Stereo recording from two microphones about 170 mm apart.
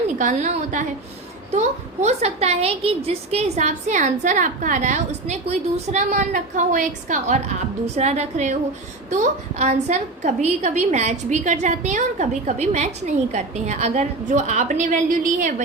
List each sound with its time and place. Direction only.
0.2 s a woman's voice: 45° right (ahead or behind)